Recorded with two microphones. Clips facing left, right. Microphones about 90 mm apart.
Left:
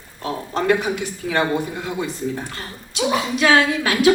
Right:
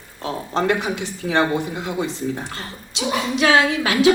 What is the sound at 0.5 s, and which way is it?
Speech, 25° right (ahead or behind).